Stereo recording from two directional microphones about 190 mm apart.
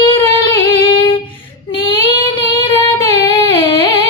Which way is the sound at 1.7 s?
25° left (ahead or behind).